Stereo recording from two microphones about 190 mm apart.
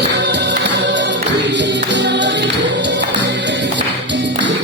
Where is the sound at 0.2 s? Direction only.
65° right (ahead or behind).